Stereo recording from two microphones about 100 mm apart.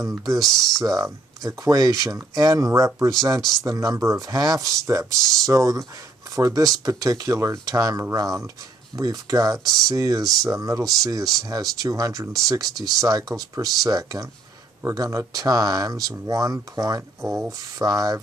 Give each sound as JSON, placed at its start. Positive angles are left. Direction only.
{"t": 0.2, "sound": "speech", "side_deg": -40}
{"t": 0.5, "sound": "speech", "side_deg": 5}
{"t": 0.8, "sound": "speech", "side_deg": -35}
{"t": 10.8, "sound": "speech", "side_deg": 0}
{"t": 11.3, "sound": "speech", "side_deg": -40}
{"t": 12.6, "sound": "speech", "side_deg": 0}
{"t": 13.0, "sound": "speech", "side_deg": -35}
{"t": 17.3, "sound": "speech", "side_deg": 0}
{"t": 17.6, "sound": "speech", "side_deg": -35}